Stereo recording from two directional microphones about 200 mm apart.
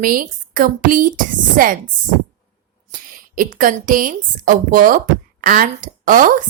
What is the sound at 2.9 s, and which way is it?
A woman's voice, 45° right (ahead or behind).